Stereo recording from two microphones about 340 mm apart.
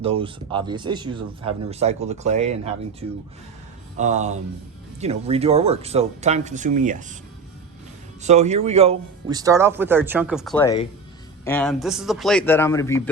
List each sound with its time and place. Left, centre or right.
0.0 s speech: centre
3.9 s speech: right
8.2 s a man's voice: centre